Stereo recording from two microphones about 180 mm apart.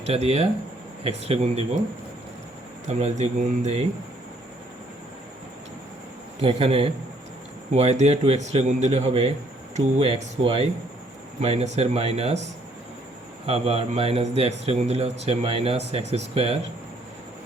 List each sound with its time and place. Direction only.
0.0 s speech: 35° right (ahead or behind)
2.8 s speech: 40° right (ahead or behind)
6.4 s speech: 30° right (ahead or behind)
13.5 s speech: 30° right (ahead or behind)